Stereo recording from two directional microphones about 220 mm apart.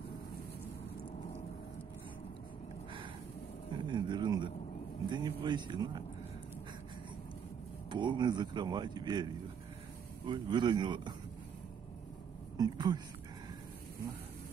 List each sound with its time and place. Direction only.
3.7 s a sound: 20° right (ahead or behind)
7.9 s speech: 20° right (ahead or behind)
12.5 s speech: 20° right (ahead or behind)